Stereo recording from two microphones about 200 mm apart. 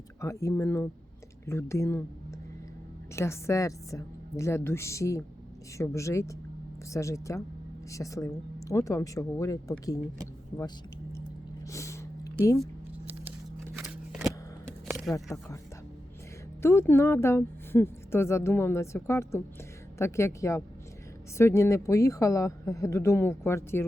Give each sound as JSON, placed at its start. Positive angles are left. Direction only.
{"t": 0.2, "sound": "a woman's voice", "side_deg": 15}
{"t": 3.2, "sound": "a woman's voice", "side_deg": 15}
{"t": 11.6, "sound": "snort", "side_deg": 15}
{"t": 13.7, "sound": "a sound", "side_deg": -5}
{"t": 16.6, "sound": "a woman's voice", "side_deg": 10}